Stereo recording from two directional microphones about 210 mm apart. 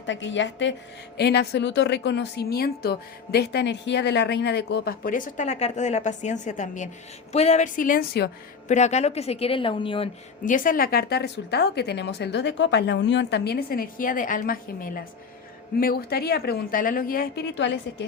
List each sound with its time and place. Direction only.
0.0 s a woman's voice: 60° left (ahead or behind)
8.6 s a woman's voice: 35° left (ahead or behind)
10.4 s a woman's voice: 40° left (ahead or behind); by 17.7 s 55° left (ahead or behind)